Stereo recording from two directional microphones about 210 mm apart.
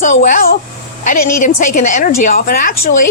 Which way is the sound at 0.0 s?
35° left (ahead or behind).